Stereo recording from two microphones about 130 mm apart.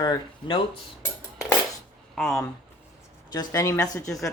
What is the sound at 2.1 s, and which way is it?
Speech, 5° left (ahead or behind).